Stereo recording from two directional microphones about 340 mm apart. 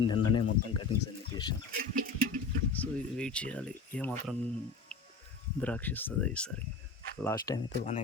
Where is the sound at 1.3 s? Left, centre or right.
Centre.